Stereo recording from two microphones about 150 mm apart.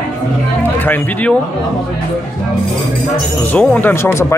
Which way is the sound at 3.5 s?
10° left (ahead or behind).